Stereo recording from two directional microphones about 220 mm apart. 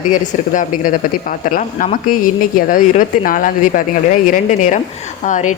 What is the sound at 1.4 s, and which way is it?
Speech, 35° left (ahead or behind).